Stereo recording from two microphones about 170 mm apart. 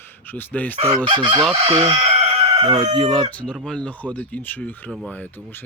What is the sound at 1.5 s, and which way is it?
Speech, 35° right (ahead or behind).